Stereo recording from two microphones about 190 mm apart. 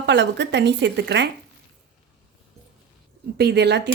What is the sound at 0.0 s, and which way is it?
Speech, 65° right (ahead or behind).